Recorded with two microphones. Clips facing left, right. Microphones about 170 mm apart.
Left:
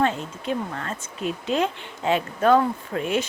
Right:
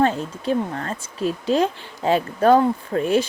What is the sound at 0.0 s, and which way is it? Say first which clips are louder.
Speech: right 4 dB; 35° right (ahead or behind).